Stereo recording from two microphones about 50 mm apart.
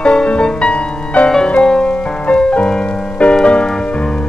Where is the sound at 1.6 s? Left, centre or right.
Centre.